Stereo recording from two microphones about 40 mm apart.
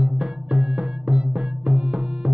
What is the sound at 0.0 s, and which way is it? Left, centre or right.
Music, right.